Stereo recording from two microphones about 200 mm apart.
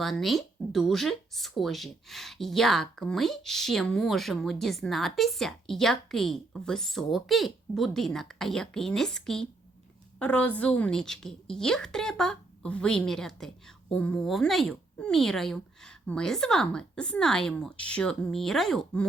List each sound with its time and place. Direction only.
0.0 s speech: centre (ahead or behind)